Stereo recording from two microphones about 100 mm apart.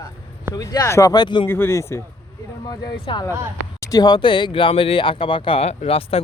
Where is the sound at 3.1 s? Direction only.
50° left (ahead or behind).